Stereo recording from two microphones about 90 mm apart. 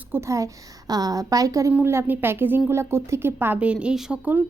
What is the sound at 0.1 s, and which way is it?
A woman's voice, 35° right (ahead or behind).